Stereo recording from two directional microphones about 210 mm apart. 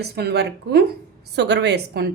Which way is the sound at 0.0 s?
50° right (ahead or behind).